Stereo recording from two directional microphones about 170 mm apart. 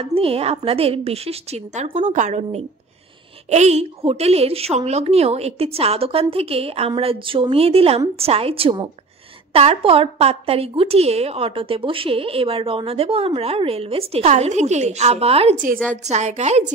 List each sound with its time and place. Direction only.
0.0 s a woman's voice: 35° right (ahead or behind)
15.5 s a woman's voice: 50° right (ahead or behind)
15.9 s a woman's voice: 40° right (ahead or behind)